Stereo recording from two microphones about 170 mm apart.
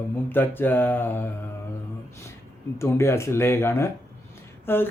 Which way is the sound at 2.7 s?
15° left (ahead or behind).